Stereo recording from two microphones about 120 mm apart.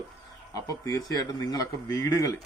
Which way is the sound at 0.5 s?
30° left (ahead or behind).